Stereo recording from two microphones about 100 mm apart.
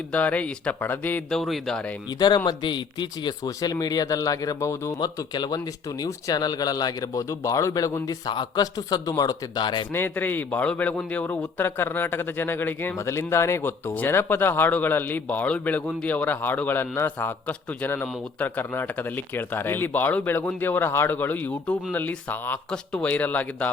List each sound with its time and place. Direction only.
0.1 s speech: 15° left (ahead or behind)
1.3 s speech: centre (ahead or behind)
2.0 s speech: 45° left (ahead or behind); by 4.9 s 30° left (ahead or behind)
4.9 s speech: 45° left (ahead or behind)
8.3 s speech: 50° left (ahead or behind)
8.6 s speech: 40° left (ahead or behind)
9.9 s a man's voice: 20° left (ahead or behind)